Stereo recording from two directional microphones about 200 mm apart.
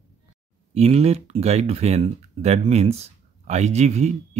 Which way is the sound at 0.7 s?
30° right (ahead or behind).